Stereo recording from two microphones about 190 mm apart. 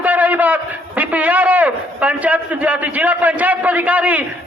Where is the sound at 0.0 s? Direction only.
10° right (ahead or behind).